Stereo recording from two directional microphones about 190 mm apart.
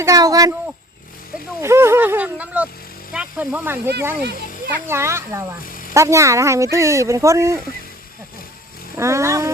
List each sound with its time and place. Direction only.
0.0 s a woman's voice: 20° right (ahead or behind)
1.6 s speech: 15° right (ahead or behind)
5.6 s a sound: 45° left (ahead or behind)
5.9 s speech: 15° right (ahead or behind)
9.0 s speech: 15° right (ahead or behind)